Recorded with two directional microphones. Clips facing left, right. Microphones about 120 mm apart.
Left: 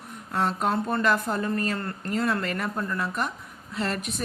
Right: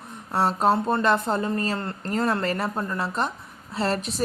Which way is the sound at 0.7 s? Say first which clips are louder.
Right 2 dB; 25° right (ahead or behind).